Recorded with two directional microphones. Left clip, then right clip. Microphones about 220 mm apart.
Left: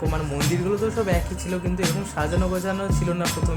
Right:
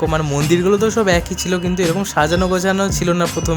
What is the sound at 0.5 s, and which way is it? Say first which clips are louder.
Speech: right 11 dB; 40° right (ahead or behind).